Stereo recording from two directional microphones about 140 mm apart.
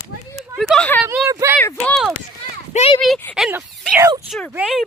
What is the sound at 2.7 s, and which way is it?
Speech, 50° left (ahead or behind).